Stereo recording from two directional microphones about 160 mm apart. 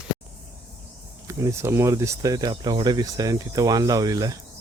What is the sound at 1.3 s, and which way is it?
Speech, 20° right (ahead or behind).